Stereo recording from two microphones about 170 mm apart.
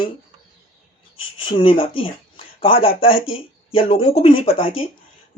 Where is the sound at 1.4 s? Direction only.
30° left (ahead or behind).